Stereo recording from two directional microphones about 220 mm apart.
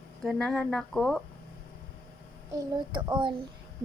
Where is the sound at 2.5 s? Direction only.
20° right (ahead or behind).